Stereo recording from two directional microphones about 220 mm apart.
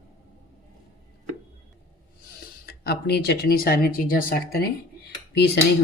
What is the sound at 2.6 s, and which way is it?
Speech, 45° left (ahead or behind).